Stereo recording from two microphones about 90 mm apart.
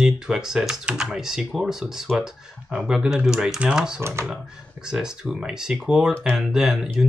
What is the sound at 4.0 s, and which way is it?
Speech, 30° right (ahead or behind).